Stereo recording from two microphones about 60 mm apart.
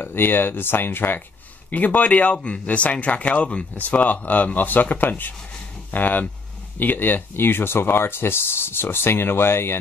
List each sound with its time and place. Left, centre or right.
0.0 s speech: left